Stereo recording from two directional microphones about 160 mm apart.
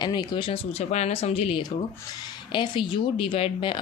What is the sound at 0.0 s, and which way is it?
Speech, 25° left (ahead or behind).